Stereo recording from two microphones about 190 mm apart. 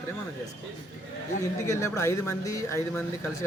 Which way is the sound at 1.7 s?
15° left (ahead or behind).